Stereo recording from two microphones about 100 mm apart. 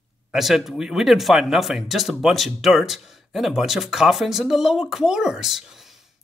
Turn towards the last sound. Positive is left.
turn(degrees=0)  # may be behind; listen again after turning